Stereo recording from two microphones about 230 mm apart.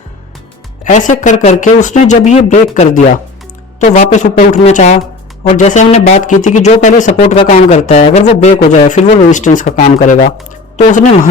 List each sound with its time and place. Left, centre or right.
0.9 s a woman's voice: left